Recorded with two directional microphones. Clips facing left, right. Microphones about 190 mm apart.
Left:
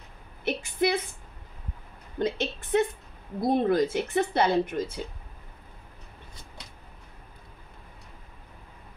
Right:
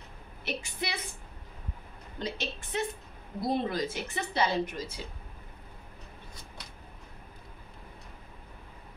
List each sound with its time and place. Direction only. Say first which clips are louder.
0.5 s a woman's voice: left 10 dB; 50° left (ahead or behind)
2.1 s a woman's voice: left 8 dB; 55° left (ahead or behind)